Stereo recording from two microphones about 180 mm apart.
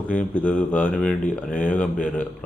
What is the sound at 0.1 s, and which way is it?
Speech, 10° left (ahead or behind).